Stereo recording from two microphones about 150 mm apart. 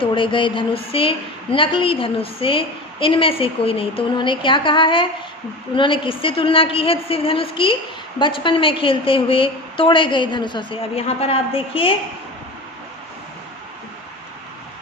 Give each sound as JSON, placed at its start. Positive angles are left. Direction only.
{"t": 0.0, "sound": "a woman's voice", "side_deg": 35}